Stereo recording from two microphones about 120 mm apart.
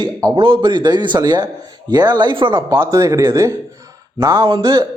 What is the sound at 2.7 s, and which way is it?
A man's voice, 25° right (ahead or behind).